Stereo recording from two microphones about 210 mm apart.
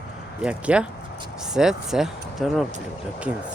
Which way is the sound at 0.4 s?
5° right (ahead or behind).